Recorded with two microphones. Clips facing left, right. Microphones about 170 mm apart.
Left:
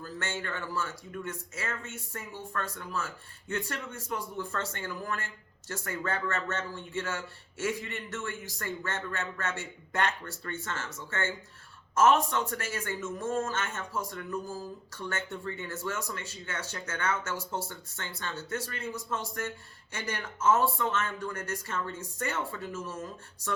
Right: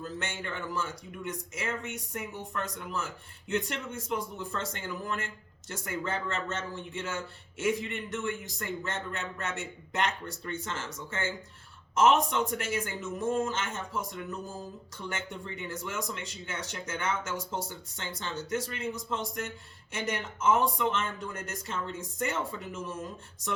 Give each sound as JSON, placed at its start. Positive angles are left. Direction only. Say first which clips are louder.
{"t": 0.0, "sound": "speech", "louder": "even", "side_deg": -20}